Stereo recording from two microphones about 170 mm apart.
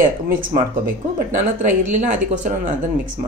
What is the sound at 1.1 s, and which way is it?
Speech, 50° right (ahead or behind).